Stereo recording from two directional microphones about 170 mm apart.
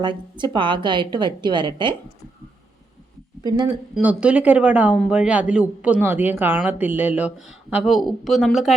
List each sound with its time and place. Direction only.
0.0 s a woman's voice: 25° right (ahead or behind)
3.9 s speech: 5° right (ahead or behind)